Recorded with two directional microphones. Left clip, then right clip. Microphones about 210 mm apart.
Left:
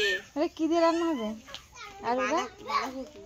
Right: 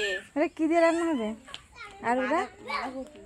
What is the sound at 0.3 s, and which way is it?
A child's voice, 40° right (ahead or behind).